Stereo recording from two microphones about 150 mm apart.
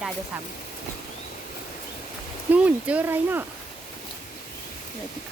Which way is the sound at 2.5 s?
10° right (ahead or behind).